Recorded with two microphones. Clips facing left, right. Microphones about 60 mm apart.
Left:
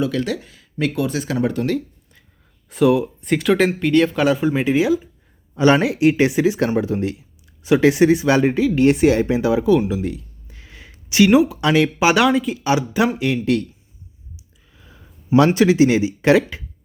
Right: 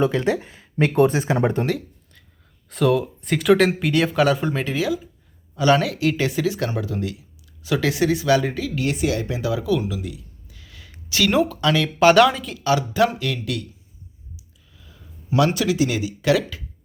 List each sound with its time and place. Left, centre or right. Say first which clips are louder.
0.0 s speech: right 2 dB; right
2.6 s speech: left 3 dB; centre; by 10.9 s left
11.3 s speech: left 3 dB; centre
11.6 s speech: left 4 dB; left
11.9 s speech: right 1 dB; centre
12.5 s speech: left 1 dB; left
14.8 s speech: even; left